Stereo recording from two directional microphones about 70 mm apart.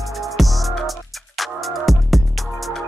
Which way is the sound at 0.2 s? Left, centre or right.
Centre.